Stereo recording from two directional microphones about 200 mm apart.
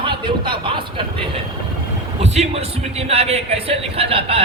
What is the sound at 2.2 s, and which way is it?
A man's voice, 30° right (ahead or behind).